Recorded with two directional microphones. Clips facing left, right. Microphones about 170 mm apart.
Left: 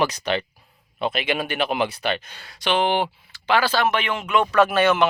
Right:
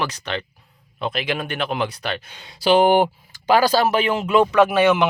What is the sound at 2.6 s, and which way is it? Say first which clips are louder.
Speech: right 6 dB; 40° right (ahead or behind).